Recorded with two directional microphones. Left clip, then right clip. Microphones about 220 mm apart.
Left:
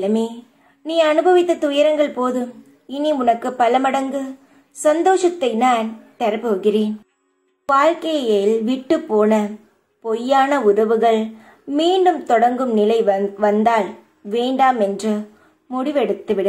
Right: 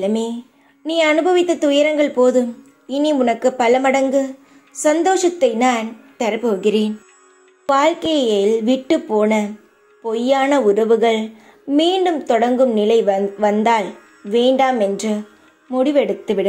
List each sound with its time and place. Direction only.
0.0 s a woman's voice: 20° right (ahead or behind)